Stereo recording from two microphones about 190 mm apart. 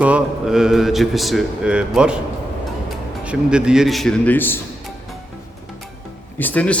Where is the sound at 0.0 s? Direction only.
5° right (ahead or behind).